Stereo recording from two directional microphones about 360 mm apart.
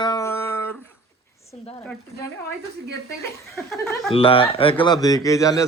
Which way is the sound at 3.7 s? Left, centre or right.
Centre.